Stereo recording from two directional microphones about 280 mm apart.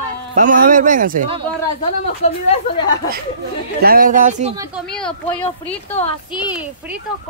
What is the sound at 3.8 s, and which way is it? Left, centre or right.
Speech, right.